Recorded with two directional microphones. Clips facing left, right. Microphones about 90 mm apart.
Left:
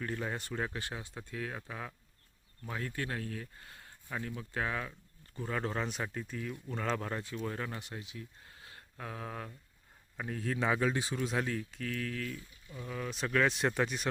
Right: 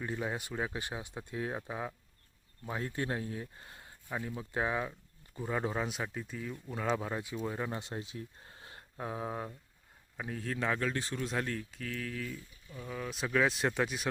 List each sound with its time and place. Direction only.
0.0 s speech: 10° right (ahead or behind)
7.7 s speech: 25° right (ahead or behind)
10.2 s speech: centre (ahead or behind)